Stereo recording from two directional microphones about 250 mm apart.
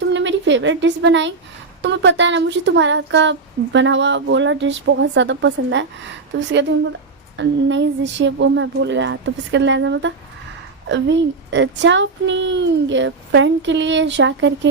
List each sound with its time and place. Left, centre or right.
0.1 s a woman's voice: right
7.3 s speech: right